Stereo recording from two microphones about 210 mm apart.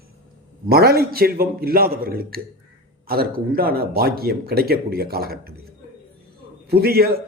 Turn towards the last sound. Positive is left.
turn(degrees=-45)  # may be behind; listen again after turning